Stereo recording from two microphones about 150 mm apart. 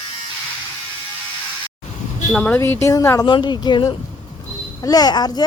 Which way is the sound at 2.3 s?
10° left (ahead or behind).